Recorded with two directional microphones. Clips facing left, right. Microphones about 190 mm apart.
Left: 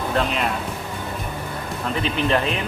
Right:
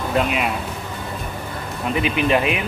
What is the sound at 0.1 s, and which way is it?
Speech, 10° right (ahead or behind).